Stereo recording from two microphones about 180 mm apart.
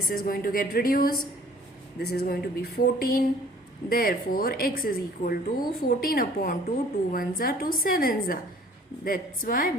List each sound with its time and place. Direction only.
0.1 s a woman's voice: 50° left (ahead or behind)